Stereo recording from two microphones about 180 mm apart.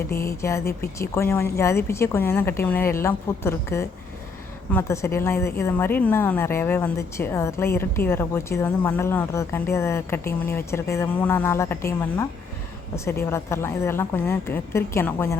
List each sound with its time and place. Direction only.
0.1 s a woman's voice: 15° left (ahead or behind)
0.6 s speech: 60° left (ahead or behind)
0.9 s a woman's voice: 15° left (ahead or behind)